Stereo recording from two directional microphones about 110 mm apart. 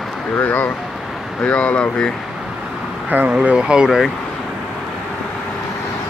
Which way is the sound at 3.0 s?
15° right (ahead or behind).